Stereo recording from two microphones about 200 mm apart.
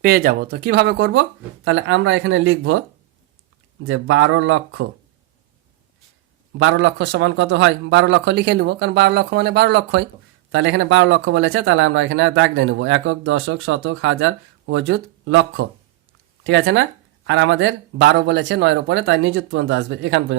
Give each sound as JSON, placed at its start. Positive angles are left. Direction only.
{"t": 0.0, "sound": "speech", "side_deg": -50}
{"t": 3.8, "sound": "speech", "side_deg": -85}
{"t": 6.6, "sound": "a man's voice", "side_deg": -75}